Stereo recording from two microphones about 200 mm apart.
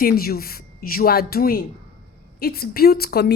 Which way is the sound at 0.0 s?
50° left (ahead or behind).